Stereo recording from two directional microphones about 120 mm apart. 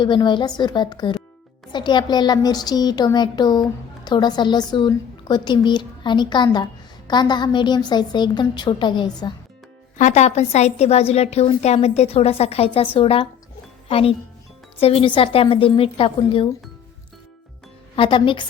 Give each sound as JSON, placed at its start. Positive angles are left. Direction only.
{"t": 0.0, "sound": "a woman's voice", "side_deg": 40}
{"t": 10.0, "sound": "a woman's voice", "side_deg": 70}
{"t": 17.9, "sound": "a woman's voice", "side_deg": 45}